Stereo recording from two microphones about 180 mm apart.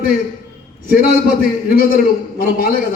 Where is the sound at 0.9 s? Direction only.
55° left (ahead or behind).